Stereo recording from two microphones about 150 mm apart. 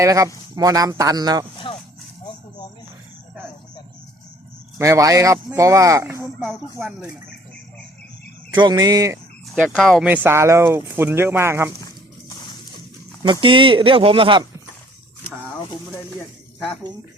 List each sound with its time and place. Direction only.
0.0 s speech: 20° right (ahead or behind)
1.7 s a sound: 35° left (ahead or behind)
4.8 s speech: 20° right (ahead or behind)
6.2 s speech: centre (ahead or behind)
8.4 s speech: 25° right (ahead or behind)
9.6 s speech: 5° left (ahead or behind)
10.1 s speech: 15° right (ahead or behind)
13.2 s speech: 30° right (ahead or behind)